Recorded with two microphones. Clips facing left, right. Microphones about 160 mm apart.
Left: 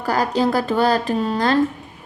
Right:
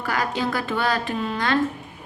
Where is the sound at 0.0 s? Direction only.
35° left (ahead or behind).